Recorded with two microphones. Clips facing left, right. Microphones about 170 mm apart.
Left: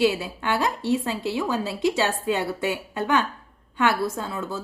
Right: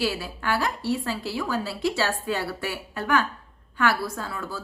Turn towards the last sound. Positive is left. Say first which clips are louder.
# left 3 dB
turn(degrees=20)  # may be behind; listen again after turning